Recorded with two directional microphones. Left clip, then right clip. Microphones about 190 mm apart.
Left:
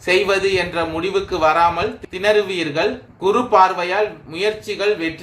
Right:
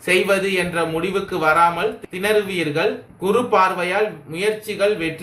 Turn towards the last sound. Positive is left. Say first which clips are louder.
# right 1 dB
turn(degrees=45)  # may be behind; listen again after turning